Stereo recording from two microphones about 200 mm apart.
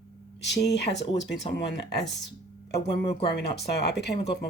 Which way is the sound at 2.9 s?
30° left (ahead or behind).